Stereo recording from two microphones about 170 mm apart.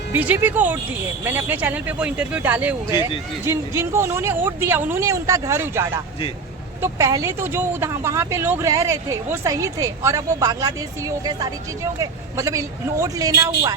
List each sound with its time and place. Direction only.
0.1 s speech: 10° right (ahead or behind)